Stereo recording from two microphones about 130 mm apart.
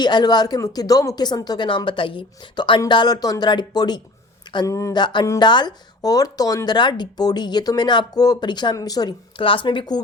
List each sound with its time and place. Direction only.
0.0 s speech: 35° left (ahead or behind)
5.4 s speech: 35° left (ahead or behind)